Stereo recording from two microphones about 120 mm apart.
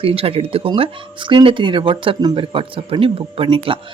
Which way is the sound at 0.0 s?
50° right (ahead or behind).